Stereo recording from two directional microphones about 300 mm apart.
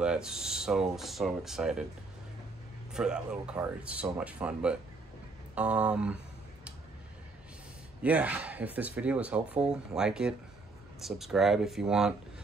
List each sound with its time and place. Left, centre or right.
0.0 s speech: centre
2.9 s speech: centre
8.0 s speech: centre